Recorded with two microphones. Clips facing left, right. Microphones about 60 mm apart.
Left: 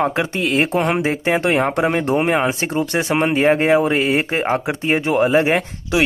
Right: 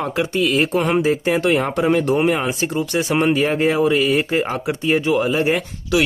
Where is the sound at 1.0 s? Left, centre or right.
Left.